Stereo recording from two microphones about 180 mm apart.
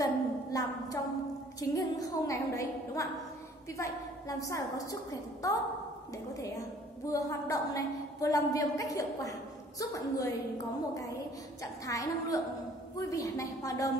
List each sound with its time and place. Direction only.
0.0 s a sound: 20° left (ahead or behind)
1.6 s a woman's voice: 20° left (ahead or behind)
7.1 s a woman's voice: 20° left (ahead or behind)
11.6 s a woman's voice: 20° left (ahead or behind)